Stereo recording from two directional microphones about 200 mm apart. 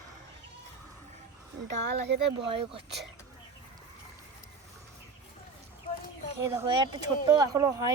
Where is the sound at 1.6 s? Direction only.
55° right (ahead or behind).